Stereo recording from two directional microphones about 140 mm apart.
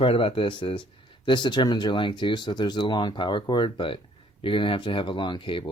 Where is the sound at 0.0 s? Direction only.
40° left (ahead or behind).